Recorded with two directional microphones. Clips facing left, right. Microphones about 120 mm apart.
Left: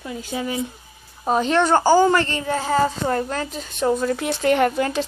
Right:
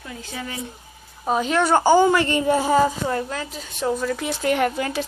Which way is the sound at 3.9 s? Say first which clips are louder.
Left 3 dB; 25° left (ahead or behind).